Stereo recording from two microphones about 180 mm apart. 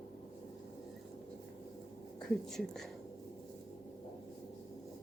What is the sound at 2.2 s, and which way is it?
Speech, centre (ahead or behind).